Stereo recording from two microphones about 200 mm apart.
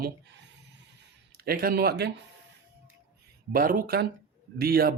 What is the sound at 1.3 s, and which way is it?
Speech, 50° right (ahead or behind).